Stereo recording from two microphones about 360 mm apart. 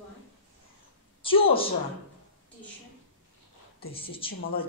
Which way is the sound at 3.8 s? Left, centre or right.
Centre.